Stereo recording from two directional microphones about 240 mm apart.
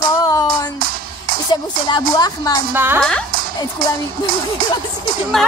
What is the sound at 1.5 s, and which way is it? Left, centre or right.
Speech, centre.